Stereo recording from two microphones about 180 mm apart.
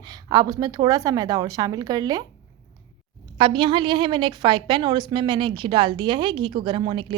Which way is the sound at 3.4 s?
25° right (ahead or behind).